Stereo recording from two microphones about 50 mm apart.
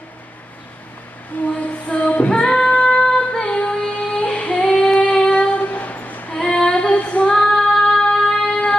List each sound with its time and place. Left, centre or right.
1.3 s a sound: left
1.9 s singing: left
3.1 s female singing: centre; by 6.2 s left
6.3 s female singing: centre